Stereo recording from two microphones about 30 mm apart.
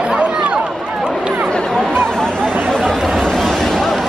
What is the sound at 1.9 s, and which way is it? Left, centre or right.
Chatter, left.